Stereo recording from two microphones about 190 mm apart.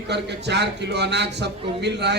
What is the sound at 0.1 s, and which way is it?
Speech, 65° right (ahead or behind).